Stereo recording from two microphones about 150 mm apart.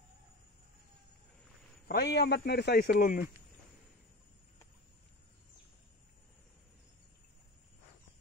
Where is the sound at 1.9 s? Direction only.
90° left.